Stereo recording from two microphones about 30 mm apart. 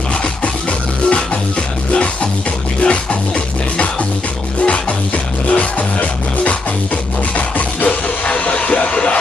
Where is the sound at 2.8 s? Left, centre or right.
Left.